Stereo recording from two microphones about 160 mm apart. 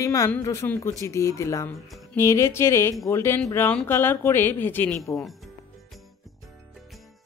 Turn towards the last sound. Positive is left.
turn(degrees=0)  # may be behind; listen again after turning